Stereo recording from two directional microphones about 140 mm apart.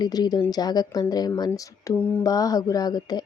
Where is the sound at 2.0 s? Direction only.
15° left (ahead or behind).